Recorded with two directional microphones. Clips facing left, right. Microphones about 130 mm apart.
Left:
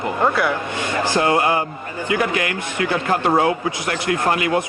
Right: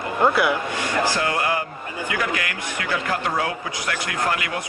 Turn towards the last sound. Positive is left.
turn(degrees=25)  # may be behind; listen again after turning